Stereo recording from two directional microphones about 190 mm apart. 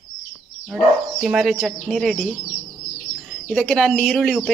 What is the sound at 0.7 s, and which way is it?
Speech, centre (ahead or behind).